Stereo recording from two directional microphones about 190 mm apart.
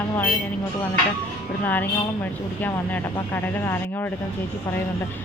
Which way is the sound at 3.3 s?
15° left (ahead or behind).